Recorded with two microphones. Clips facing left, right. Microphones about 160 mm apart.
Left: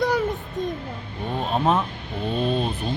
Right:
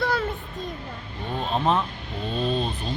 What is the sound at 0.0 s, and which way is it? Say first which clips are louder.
Child singing: left 4 dB; 15° left (ahead or behind).